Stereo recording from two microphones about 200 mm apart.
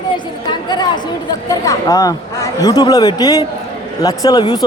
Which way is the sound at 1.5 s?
15° left (ahead or behind).